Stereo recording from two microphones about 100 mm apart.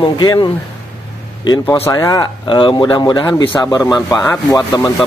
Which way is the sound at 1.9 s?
40° left (ahead or behind).